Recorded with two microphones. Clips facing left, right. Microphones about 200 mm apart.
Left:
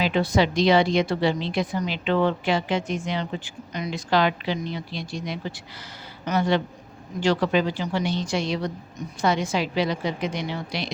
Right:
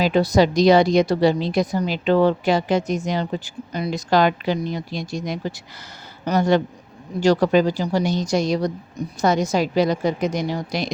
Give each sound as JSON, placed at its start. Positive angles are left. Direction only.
{"t": 0.0, "sound": "a woman's voice", "side_deg": -40}